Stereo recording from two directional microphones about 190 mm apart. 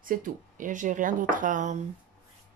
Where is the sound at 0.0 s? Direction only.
45° right (ahead or behind).